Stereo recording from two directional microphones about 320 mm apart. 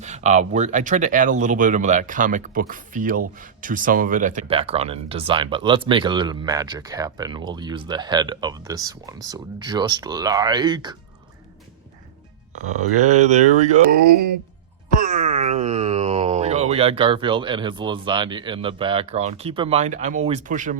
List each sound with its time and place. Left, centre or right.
0.0 s speech: right
13.0 s a sound: right
14.9 s speech: right